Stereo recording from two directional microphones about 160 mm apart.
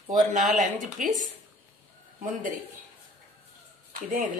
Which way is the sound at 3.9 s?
60° right (ahead or behind).